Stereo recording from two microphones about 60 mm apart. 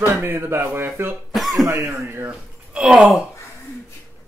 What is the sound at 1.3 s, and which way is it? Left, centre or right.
Cough, centre.